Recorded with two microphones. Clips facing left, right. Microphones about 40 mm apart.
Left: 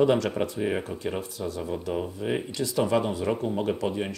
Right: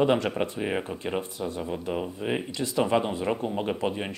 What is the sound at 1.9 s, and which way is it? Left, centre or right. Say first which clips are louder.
Speech: left 1 dB; centre.